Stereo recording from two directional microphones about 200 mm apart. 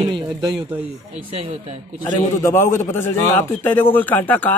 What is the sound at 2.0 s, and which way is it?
A man's voice, 15° left (ahead or behind).